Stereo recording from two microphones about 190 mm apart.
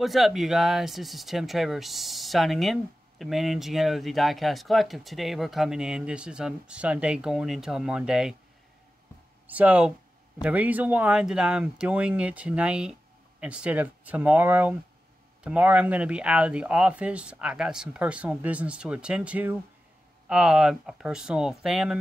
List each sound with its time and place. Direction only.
0.0 s speech: centre (ahead or behind)
9.5 s speech: 5° right (ahead or behind)